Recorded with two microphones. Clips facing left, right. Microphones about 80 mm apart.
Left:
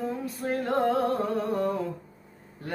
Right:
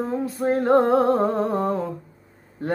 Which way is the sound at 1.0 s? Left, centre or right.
Right.